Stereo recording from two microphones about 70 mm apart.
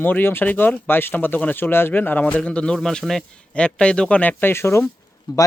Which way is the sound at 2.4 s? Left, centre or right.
Centre.